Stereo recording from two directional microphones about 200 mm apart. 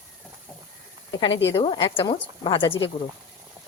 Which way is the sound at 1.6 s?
30° left (ahead or behind).